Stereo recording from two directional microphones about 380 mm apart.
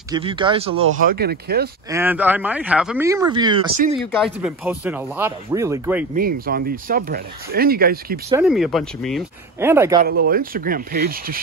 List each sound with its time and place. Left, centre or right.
0.1 s speech: centre
1.9 s speech: centre
4.0 s speech: centre
6.1 s speech: right
8.3 s speech: centre
10.0 s speech: right